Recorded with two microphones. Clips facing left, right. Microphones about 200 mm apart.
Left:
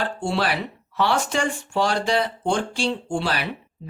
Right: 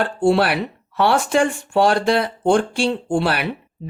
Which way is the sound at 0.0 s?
55° right (ahead or behind).